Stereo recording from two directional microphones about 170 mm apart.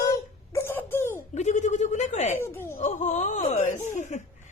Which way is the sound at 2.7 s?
45° left (ahead or behind).